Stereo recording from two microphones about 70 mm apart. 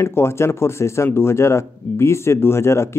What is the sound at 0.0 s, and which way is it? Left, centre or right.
Speech, left.